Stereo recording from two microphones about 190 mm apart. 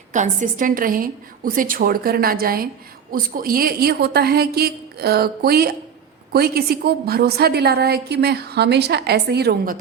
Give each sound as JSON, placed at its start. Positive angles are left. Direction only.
{"t": 0.1, "sound": "a woman's voice", "side_deg": -40}